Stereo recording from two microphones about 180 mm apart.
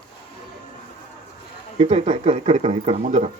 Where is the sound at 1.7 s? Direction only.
35° right (ahead or behind).